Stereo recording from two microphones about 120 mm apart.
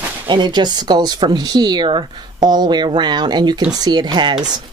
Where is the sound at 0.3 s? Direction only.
40° right (ahead or behind).